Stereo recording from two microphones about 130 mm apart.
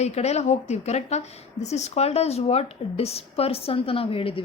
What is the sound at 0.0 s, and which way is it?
A woman's voice, 55° left (ahead or behind).